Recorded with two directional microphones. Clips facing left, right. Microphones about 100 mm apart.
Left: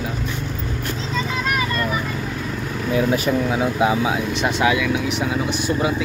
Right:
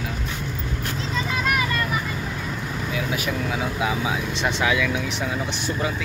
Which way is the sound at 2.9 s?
40° left (ahead or behind).